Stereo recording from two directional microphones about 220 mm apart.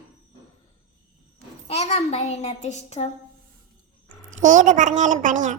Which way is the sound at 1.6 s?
30° left (ahead or behind).